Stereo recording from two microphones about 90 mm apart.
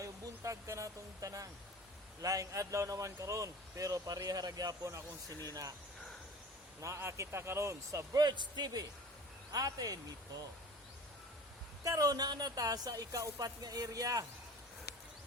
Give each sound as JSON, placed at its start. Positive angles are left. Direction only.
{"t": 0.0, "sound": "speech", "side_deg": -35}
{"t": 6.8, "sound": "speech", "side_deg": -35}
{"t": 8.2, "sound": "speech", "side_deg": -55}
{"t": 11.8, "sound": "speech", "side_deg": -40}